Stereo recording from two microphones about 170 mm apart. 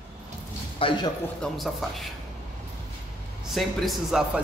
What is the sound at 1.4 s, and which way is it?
Speech, centre (ahead or behind).